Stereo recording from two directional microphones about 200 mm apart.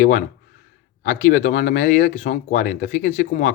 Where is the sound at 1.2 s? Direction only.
40° left (ahead or behind).